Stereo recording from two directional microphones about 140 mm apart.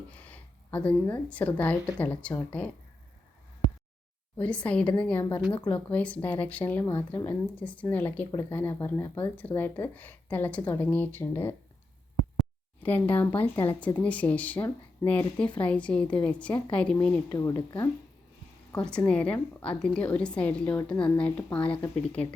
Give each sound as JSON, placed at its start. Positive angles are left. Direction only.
{"t": 0.1, "sound": "a woman's voice", "side_deg": 10}
{"t": 4.4, "sound": "a woman's voice", "side_deg": 10}
{"t": 12.8, "sound": "a woman's voice", "side_deg": 10}
{"t": 17.3, "sound": "speech", "side_deg": 25}
{"t": 18.9, "sound": "a woman's voice", "side_deg": 5}